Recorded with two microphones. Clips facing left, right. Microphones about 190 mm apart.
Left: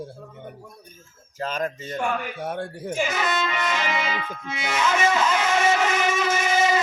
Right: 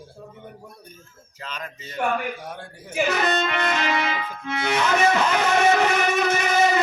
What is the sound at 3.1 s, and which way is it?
Speech, 65° right (ahead or behind).